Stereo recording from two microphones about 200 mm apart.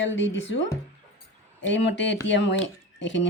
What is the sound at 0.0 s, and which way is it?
Speech, 65° left (ahead or behind).